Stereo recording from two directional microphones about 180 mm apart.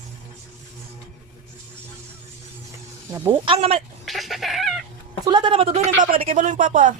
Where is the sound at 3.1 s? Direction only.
15° right (ahead or behind).